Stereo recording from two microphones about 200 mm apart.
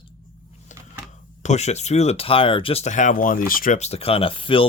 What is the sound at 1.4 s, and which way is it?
Speech, 35° left (ahead or behind).